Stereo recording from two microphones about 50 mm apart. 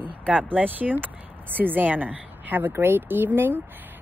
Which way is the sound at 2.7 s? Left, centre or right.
Right.